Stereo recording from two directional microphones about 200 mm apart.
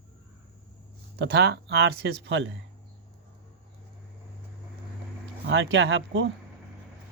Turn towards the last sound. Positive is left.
turn(degrees=-65)  # may be behind; listen again after turning